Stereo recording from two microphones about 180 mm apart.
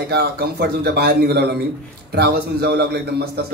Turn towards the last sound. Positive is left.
turn(degrees=-65)  # may be behind; listen again after turning